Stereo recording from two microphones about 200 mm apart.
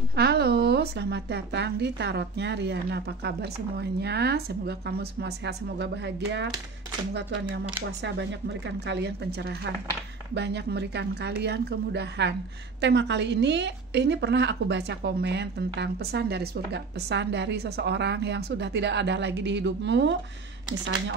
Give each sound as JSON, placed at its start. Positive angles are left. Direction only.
{"t": 0.1, "sound": "a woman's voice", "side_deg": -55}